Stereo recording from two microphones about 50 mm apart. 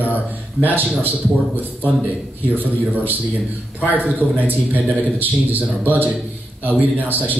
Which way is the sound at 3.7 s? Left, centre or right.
Right.